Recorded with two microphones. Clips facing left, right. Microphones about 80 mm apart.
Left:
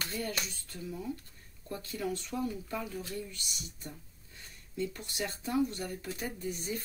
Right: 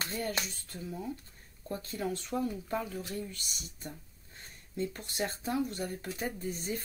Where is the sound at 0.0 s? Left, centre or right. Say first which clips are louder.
Right 2 dB; right.